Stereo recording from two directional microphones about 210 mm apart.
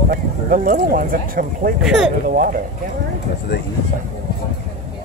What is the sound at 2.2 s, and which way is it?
Speech, 45° right (ahead or behind).